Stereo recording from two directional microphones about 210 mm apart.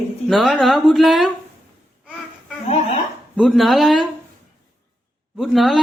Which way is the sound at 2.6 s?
30° left (ahead or behind).